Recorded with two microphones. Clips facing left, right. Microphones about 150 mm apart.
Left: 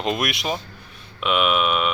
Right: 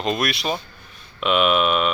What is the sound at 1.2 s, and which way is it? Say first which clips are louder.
Speech: right 2 dB; 5° left (ahead or behind).